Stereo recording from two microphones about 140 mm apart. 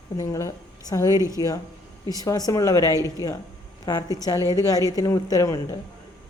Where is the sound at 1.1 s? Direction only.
20° right (ahead or behind).